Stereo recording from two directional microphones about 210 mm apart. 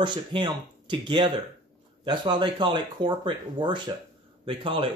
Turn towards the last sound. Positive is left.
turn(degrees=-25)  # may be behind; listen again after turning